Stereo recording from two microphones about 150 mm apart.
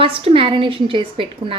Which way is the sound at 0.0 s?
40° right (ahead or behind).